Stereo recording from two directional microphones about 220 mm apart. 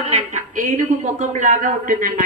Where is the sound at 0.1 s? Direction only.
35° right (ahead or behind).